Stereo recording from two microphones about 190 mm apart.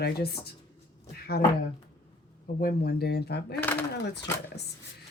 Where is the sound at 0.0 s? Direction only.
55° left (ahead or behind).